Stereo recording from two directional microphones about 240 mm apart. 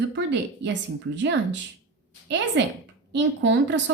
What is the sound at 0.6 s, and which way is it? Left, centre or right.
A woman's voice, right.